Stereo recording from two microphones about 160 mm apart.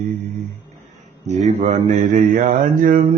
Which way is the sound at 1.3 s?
45° right (ahead or behind).